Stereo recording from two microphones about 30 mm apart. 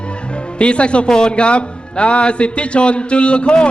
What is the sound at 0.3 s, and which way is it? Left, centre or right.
Speech, left.